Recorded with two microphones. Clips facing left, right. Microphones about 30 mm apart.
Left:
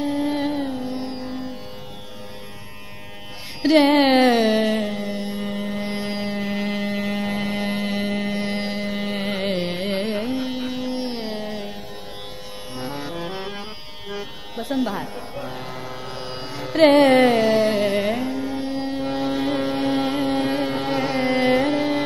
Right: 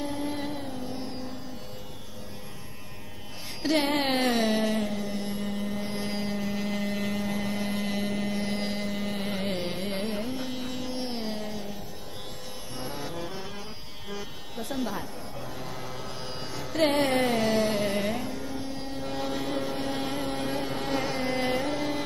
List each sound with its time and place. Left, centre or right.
0.2 s carnatic music: left
3.7 s speech: left
4.2 s music: left
10.3 s music: left
12.7 s music: left
13.3 s music: left
14.1 s music: left
16.2 s carnatic music: left
16.8 s carnatic music: left
17.3 s carnatic music: left
18.5 s music: left
19.4 s music: left
19.9 s music: left
21.0 s carnatic music: left